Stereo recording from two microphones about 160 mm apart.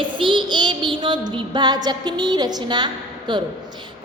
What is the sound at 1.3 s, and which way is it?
A woman's voice, 30° right (ahead or behind).